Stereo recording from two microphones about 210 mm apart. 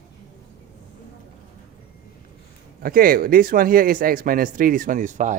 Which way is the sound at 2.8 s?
45° right (ahead or behind).